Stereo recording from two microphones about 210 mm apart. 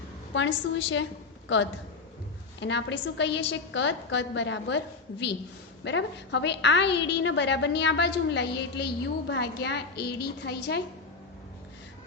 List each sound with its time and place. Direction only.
0.3 s a woman's voice: 60° left (ahead or behind)
5.8 s a woman's voice: 55° left (ahead or behind)